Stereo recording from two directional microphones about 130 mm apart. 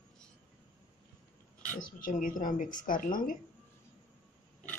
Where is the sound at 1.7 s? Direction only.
90° left.